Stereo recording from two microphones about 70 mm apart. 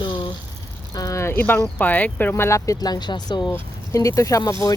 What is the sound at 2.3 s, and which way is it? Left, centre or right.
Speech, left.